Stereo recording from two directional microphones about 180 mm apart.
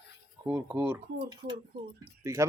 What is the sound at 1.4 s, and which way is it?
Speech, 65° right (ahead or behind).